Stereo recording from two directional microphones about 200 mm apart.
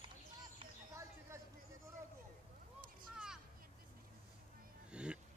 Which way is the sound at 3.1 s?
5° right (ahead or behind).